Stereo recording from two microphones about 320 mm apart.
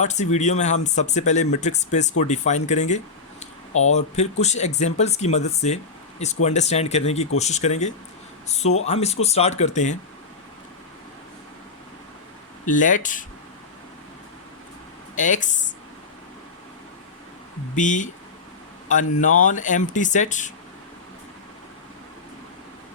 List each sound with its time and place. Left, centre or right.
0.0 s speech: left
3.7 s speech: left
3.9 s speech: left
12.6 s speech: left
15.1 s speech: left
17.7 s speech: left